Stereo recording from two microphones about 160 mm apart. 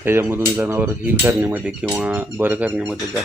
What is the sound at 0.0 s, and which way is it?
Speech, 15° right (ahead or behind).